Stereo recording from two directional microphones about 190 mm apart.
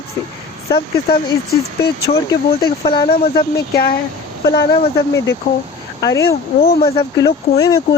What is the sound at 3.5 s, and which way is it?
Speech, 55° left (ahead or behind).